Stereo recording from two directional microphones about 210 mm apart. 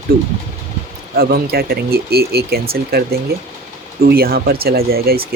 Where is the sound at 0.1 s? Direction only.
45° right (ahead or behind).